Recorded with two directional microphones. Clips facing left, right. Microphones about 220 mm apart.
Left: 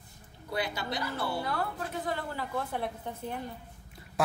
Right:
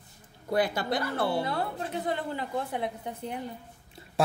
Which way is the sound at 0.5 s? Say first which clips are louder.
Right 7 dB; 50° right (ahead or behind).